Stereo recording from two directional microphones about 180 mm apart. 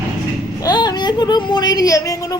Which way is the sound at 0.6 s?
25° left (ahead or behind).